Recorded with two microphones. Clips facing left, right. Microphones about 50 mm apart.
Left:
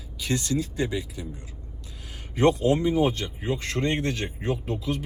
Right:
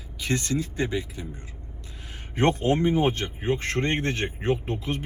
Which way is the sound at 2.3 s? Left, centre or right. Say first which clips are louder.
Left 2 dB; right.